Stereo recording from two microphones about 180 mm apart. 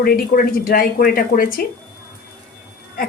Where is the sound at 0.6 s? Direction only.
55° left (ahead or behind).